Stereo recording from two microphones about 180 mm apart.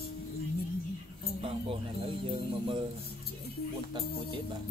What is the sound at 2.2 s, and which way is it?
Speech, 30° right (ahead or behind).